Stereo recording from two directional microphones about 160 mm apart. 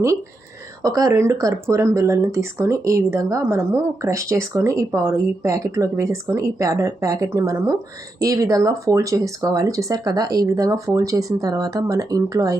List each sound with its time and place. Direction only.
0.8 s speech: 20° right (ahead or behind)